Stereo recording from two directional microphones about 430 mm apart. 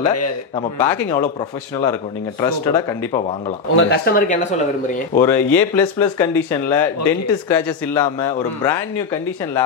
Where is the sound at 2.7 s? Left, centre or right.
Centre.